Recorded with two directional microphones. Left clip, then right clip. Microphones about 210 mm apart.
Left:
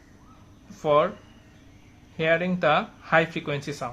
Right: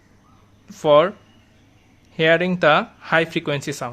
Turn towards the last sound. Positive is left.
turn(degrees=-40)  # may be behind; listen again after turning